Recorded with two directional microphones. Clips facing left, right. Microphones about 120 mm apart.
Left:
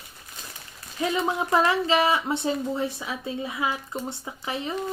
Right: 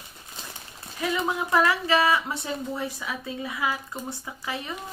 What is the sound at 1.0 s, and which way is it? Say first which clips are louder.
Speech: left 2 dB; 25° left (ahead or behind).